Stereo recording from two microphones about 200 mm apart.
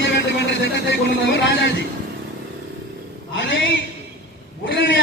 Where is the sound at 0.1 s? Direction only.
55° left (ahead or behind).